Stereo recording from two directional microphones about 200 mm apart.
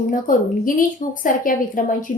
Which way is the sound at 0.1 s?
45° left (ahead or behind).